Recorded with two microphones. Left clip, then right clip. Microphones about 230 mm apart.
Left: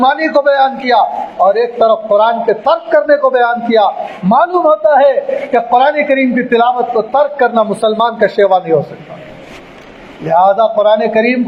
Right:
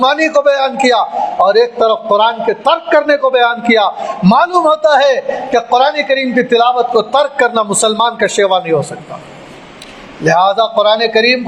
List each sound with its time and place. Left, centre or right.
0.0 s a man's voice: right
10.2 s a man's voice: right